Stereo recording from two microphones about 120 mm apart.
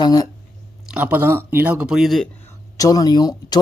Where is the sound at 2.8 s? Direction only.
30° left (ahead or behind).